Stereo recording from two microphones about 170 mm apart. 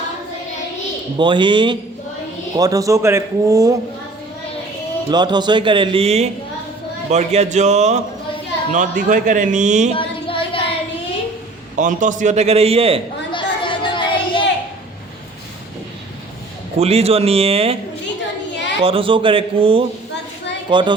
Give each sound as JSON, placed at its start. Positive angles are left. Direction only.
{"t": 1.2, "sound": "speech", "side_deg": -30}
{"t": 5.1, "sound": "a man's voice", "side_deg": -25}
{"t": 9.9, "sound": "a sound", "side_deg": 30}
{"t": 11.8, "sound": "a man's voice", "side_deg": -50}
{"t": 13.3, "sound": "chatter", "side_deg": 30}
{"t": 16.7, "sound": "a man's voice", "side_deg": -35}
{"t": 18.8, "sound": "a man's voice", "side_deg": -30}